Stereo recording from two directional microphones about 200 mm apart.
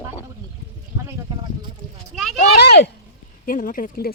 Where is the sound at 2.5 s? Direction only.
55° left (ahead or behind).